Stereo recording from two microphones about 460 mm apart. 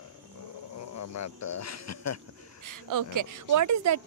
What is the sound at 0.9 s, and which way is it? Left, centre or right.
Speech, left.